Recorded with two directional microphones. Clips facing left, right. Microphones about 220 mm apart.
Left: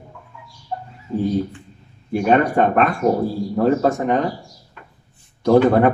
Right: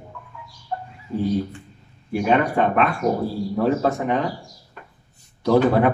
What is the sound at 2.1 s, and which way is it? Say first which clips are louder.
Speech: left 3 dB; 45° left (ahead or behind).